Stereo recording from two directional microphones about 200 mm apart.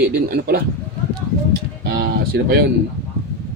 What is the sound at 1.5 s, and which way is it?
Music, 55° right (ahead or behind).